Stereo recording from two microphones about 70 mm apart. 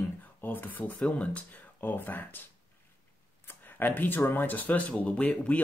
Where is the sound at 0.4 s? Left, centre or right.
Left.